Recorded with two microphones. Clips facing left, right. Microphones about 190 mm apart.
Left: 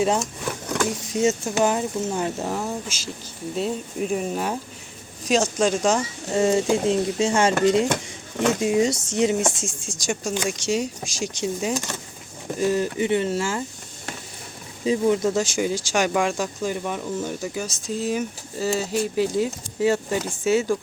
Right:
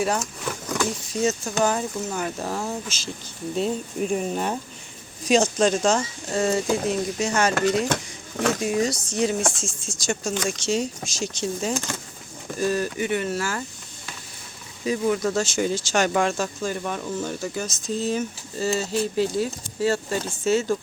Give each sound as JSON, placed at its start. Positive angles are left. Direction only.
{"t": 0.0, "sound": "speech", "side_deg": 20}
{"t": 0.4, "sound": "vehicle", "side_deg": 0}
{"t": 0.9, "sound": "speech", "side_deg": 20}
{"t": 2.5, "sound": "speech", "side_deg": 5}
{"t": 14.8, "sound": "speech", "side_deg": 25}